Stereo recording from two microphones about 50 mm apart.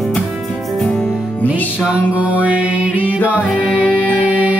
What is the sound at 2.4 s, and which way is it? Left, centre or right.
Mantra, right.